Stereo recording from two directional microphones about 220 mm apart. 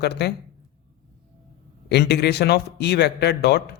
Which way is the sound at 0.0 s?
50° left (ahead or behind).